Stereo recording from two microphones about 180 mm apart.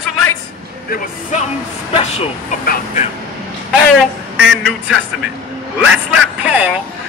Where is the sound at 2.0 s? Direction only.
35° left (ahead or behind).